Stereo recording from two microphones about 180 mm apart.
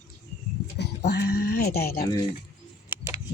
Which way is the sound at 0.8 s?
65° left (ahead or behind).